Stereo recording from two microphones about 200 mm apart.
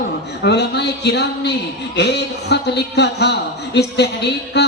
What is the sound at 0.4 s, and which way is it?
Speech, 55° left (ahead or behind).